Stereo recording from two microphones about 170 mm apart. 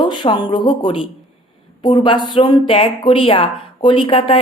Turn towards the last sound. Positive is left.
turn(degrees=35)  # may be behind; listen again after turning